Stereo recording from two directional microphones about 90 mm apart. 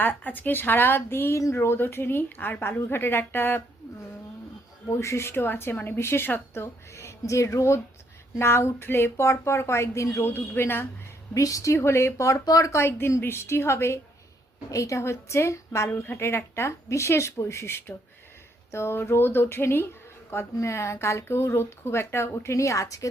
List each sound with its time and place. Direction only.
0.0 s speech: 20° left (ahead or behind)
4.9 s speech: 30° left (ahead or behind)
11.3 s speech: 35° left (ahead or behind)
12.7 s speech: 30° left (ahead or behind)